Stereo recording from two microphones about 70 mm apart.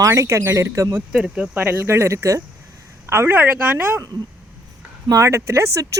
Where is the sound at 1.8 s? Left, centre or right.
Right.